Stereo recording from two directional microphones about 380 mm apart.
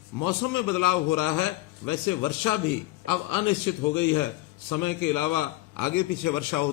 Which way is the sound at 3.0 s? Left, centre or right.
Left.